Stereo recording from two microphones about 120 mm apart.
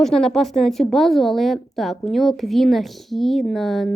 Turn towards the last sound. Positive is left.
turn(degrees=0)  # may be behind; listen again after turning